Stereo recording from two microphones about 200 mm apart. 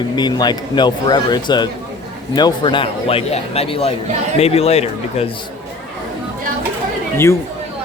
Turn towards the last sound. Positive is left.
turn(degrees=15)  # may be behind; listen again after turning